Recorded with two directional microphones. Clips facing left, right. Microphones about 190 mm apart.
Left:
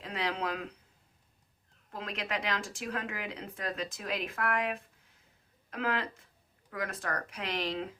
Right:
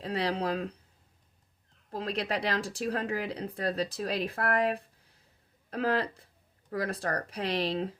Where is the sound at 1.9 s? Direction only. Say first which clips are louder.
Right 5 dB; 35° right (ahead or behind).